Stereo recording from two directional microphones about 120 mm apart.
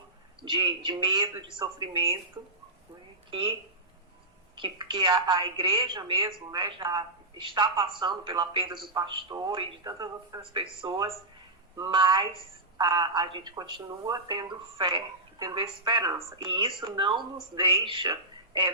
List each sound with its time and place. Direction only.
0.4 s speech: 45° right (ahead or behind)
4.5 s speech: 40° right (ahead or behind)